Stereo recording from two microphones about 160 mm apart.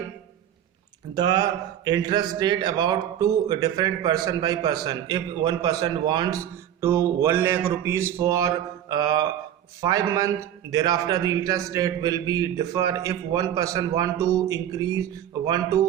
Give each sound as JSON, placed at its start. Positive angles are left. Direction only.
{"t": 1.1, "sound": "a man's voice", "side_deg": -25}